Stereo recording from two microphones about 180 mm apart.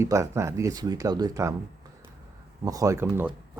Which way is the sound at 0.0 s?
15° right (ahead or behind).